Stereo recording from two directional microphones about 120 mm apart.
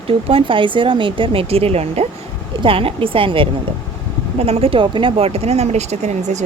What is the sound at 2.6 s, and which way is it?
Speech, 50° right (ahead or behind).